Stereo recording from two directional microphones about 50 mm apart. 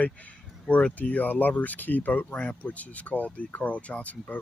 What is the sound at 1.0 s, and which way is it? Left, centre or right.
Speech, left.